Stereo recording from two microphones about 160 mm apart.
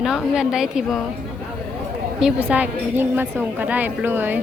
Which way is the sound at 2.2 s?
10° right (ahead or behind).